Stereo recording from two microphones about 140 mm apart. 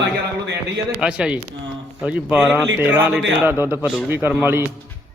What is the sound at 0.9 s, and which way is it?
Speech, 5° right (ahead or behind).